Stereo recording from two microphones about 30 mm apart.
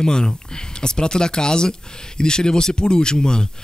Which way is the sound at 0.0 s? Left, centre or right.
Left.